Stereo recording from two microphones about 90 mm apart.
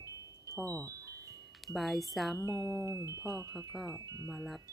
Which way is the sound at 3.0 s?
35° right (ahead or behind).